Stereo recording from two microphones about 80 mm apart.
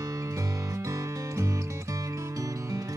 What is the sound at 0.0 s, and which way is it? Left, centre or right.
Music, right.